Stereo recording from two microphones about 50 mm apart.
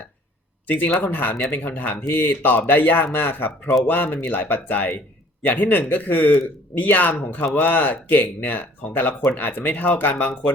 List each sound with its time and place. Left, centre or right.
0.9 s speech: left